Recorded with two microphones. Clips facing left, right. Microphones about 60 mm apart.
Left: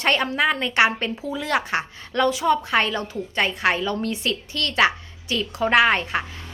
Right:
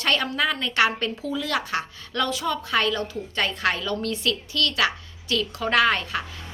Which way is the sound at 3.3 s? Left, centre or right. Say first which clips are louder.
Left 4 dB; centre.